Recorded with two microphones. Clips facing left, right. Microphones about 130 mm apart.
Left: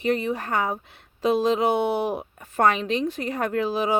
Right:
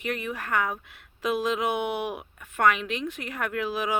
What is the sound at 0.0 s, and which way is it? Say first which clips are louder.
Speech: left 7 dB; 30° left (ahead or behind).